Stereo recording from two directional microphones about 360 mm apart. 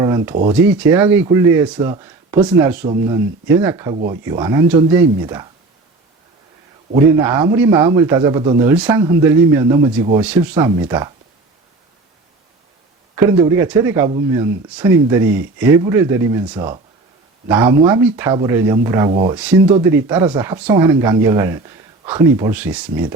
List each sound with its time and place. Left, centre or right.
0.0 s a sound: centre
0.4 s speech: centre
2.8 s speech: centre
7.2 s speech: centre
13.1 s speech: centre
19.4 s speech: centre